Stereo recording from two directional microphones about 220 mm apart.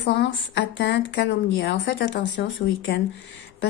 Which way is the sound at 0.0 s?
50° left (ahead or behind).